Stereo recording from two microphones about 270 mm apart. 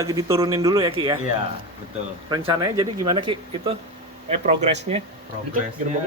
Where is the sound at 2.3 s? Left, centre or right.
Centre.